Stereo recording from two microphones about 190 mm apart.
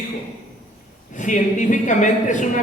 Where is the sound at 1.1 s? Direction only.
40° left (ahead or behind).